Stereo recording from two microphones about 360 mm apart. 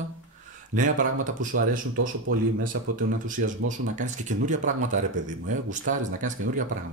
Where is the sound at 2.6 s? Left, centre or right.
Right.